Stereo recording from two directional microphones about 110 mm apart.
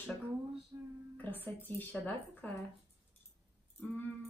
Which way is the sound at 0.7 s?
25° right (ahead or behind).